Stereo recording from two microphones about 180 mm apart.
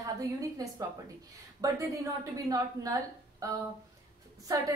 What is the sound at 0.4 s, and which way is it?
A woman's voice, 20° right (ahead or behind).